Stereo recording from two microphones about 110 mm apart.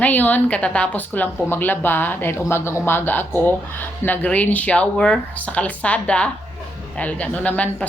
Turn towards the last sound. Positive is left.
turn(degrees=15)  # may be behind; listen again after turning